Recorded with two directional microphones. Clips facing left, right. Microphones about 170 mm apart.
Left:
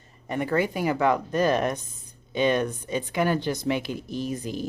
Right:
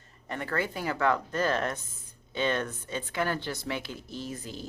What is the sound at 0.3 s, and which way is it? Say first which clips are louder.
Speech: left 7 dB; 15° left (ahead or behind).